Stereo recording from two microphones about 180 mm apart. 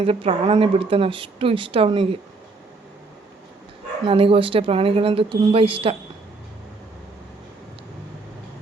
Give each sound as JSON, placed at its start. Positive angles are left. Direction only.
{"t": 0.0, "sound": "speech", "side_deg": -30}
{"t": 4.0, "sound": "speech", "side_deg": -30}